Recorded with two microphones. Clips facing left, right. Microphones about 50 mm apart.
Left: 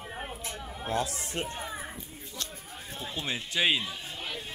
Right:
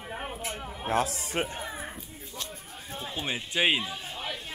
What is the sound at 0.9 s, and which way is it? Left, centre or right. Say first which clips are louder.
Speech: right 4 dB; right.